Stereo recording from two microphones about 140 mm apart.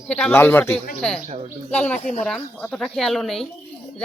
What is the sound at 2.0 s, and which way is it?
Speech, 55° left (ahead or behind).